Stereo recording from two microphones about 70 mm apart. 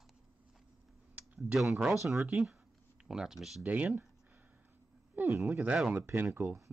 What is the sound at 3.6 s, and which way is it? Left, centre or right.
Speech, right.